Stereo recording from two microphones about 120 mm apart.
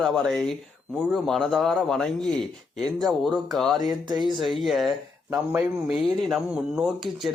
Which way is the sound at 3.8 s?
35° right (ahead or behind).